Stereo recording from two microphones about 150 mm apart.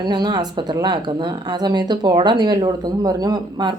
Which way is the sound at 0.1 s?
25° right (ahead or behind).